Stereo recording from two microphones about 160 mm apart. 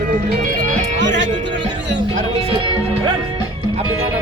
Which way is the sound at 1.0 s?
90° right.